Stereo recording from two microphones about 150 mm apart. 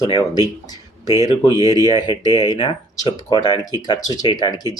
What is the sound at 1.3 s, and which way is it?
Speech, 30° left (ahead or behind).